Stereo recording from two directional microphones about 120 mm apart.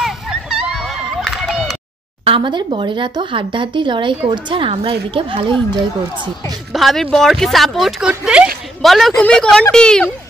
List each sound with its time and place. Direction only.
0.0 s run: 5° right (ahead or behind)
2.2 s a woman's voice: 45° right (ahead or behind)
6.7 s a woman's voice: centre (ahead or behind)